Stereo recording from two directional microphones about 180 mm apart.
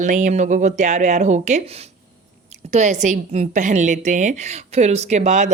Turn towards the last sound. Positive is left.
turn(degrees=-40)  # may be behind; listen again after turning